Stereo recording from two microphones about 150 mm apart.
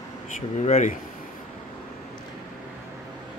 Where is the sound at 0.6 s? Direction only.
55° left (ahead or behind).